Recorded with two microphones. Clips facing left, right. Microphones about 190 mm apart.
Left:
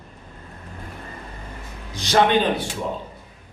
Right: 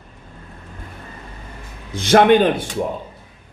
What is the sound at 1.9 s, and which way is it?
Speech, 55° right (ahead or behind).